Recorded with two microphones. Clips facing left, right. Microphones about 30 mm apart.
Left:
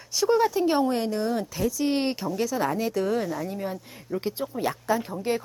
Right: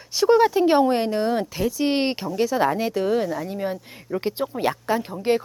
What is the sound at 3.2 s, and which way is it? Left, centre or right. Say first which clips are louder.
Speech: right 4 dB; centre.